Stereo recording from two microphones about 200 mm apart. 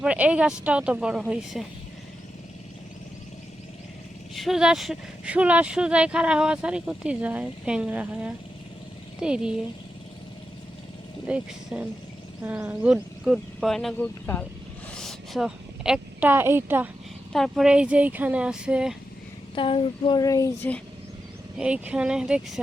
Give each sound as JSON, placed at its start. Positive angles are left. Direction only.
{"t": 0.0, "sound": "speech", "side_deg": -5}
{"t": 4.4, "sound": "speech", "side_deg": 0}
{"t": 11.3, "sound": "a woman's voice", "side_deg": -5}
{"t": 17.3, "sound": "speech", "side_deg": 0}
{"t": 19.5, "sound": "speech", "side_deg": 25}
{"t": 21.6, "sound": "speech", "side_deg": -5}